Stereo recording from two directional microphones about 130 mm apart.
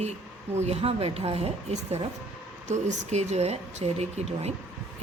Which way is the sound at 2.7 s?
60° right (ahead or behind).